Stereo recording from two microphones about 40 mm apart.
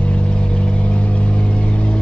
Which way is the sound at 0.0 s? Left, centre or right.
Left.